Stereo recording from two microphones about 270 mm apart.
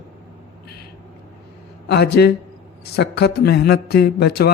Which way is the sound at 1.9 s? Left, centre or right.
Left.